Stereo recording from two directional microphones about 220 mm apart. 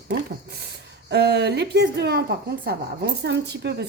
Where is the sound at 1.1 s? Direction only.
50° right (ahead or behind).